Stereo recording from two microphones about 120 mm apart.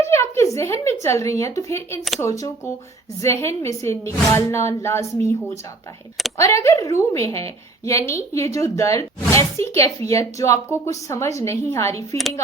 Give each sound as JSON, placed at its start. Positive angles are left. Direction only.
{"t": 0.0, "sound": "a woman's voice", "side_deg": 25}
{"t": 6.3, "sound": "a woman's voice", "side_deg": 25}